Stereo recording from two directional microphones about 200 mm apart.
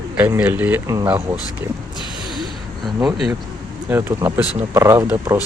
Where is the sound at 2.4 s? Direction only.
Centre (ahead or behind).